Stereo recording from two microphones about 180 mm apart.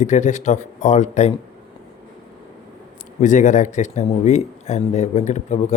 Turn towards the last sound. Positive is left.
turn(degrees=40)  # may be behind; listen again after turning